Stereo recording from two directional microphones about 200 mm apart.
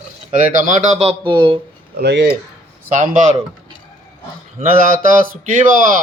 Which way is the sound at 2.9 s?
40° right (ahead or behind).